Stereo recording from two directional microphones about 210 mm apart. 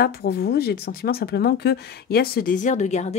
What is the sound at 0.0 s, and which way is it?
Speech, 50° left (ahead or behind).